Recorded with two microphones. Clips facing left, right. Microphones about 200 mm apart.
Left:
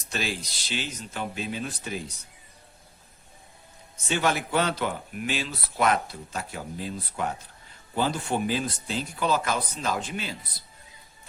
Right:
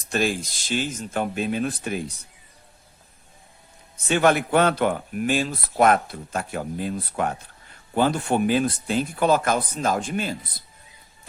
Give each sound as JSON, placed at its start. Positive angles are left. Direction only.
{"t": 0.1, "sound": "speech", "side_deg": -50}
{"t": 4.1, "sound": "speech", "side_deg": -55}